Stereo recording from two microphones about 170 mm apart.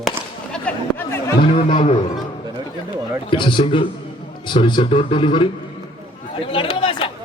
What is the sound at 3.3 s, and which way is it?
Speech, 30° left (ahead or behind).